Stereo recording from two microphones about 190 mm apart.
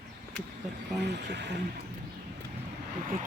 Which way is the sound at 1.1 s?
65° right (ahead or behind).